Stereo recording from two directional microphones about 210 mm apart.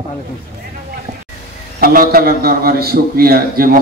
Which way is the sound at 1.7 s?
45° right (ahead or behind).